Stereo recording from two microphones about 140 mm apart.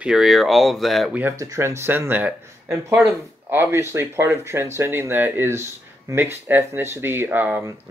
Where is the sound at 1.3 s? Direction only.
25° right (ahead or behind).